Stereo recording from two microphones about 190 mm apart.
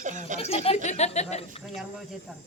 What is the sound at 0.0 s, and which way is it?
Speech, 40° right (ahead or behind).